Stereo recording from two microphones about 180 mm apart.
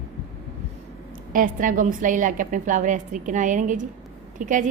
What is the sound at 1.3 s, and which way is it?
A woman's voice, 50° right (ahead or behind).